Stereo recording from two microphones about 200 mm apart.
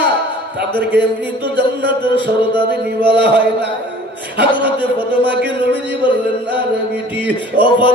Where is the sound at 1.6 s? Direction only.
25° left (ahead or behind).